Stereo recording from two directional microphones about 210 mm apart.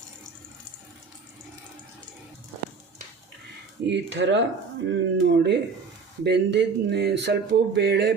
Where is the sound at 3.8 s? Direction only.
60° right (ahead or behind).